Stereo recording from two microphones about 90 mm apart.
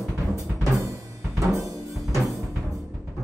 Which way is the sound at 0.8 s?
35° right (ahead or behind).